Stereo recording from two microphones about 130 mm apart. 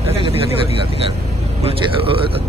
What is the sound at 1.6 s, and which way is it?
Vehicle, 45° right (ahead or behind).